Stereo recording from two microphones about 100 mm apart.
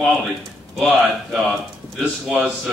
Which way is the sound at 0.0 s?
5° right (ahead or behind).